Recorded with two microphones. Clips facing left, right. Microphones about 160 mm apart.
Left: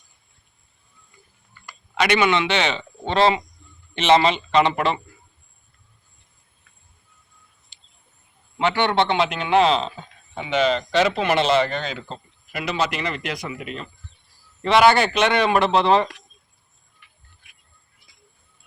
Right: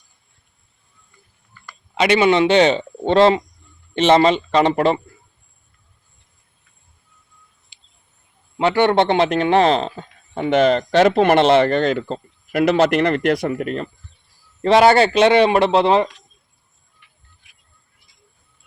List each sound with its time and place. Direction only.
2.0 s a man's voice: 30° right (ahead or behind)
7.7 s a sound: 10° right (ahead or behind)
8.5 s a man's voice: 40° right (ahead or behind)
14.6 s speech: 40° right (ahead or behind)